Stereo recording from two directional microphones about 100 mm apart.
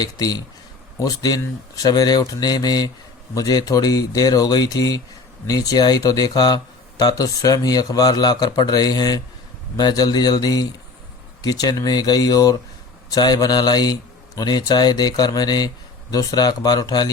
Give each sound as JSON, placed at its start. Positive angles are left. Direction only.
{"t": 0.0, "sound": "speech", "side_deg": 40}